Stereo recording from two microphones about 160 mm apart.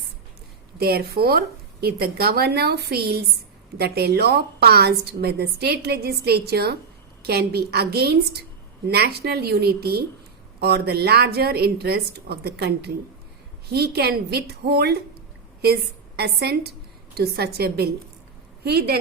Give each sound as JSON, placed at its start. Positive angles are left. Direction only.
{"t": 0.8, "sound": "a woman's voice", "side_deg": -75}
{"t": 10.6, "sound": "a woman's voice", "side_deg": -90}
{"t": 17.2, "sound": "a woman's voice", "side_deg": -80}